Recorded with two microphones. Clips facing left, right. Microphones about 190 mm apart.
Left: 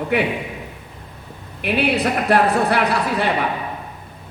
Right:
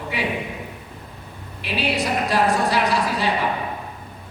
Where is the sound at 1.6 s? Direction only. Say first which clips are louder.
Left 5 dB; 60° left (ahead or behind).